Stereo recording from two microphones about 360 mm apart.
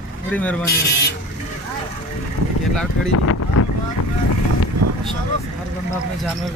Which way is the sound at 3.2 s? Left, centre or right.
Left.